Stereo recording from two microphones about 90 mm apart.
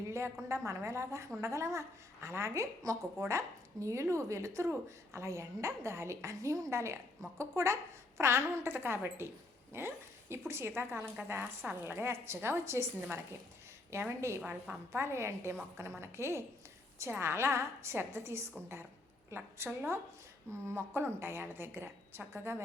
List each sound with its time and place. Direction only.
0.4 s a woman's voice: 30° right (ahead or behind)